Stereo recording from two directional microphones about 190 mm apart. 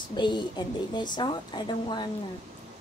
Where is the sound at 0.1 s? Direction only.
25° left (ahead or behind).